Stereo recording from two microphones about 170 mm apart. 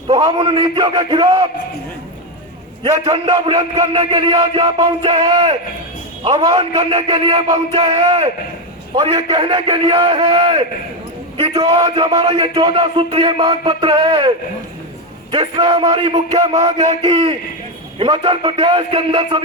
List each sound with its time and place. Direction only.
0.1 s a man's voice: 25° right (ahead or behind)
2.8 s a man's voice: 30° right (ahead or behind)